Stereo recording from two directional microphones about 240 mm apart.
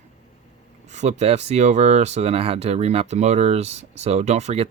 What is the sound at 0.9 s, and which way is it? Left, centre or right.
Speech, right.